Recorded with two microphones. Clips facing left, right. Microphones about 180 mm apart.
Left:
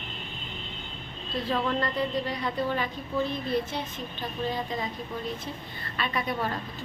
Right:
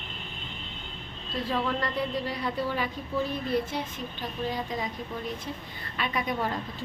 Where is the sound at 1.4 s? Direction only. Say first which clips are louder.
Left 1 dB; 10° right (ahead or behind).